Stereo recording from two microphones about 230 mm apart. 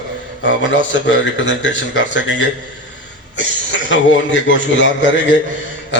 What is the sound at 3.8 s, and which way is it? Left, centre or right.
A man's voice, left.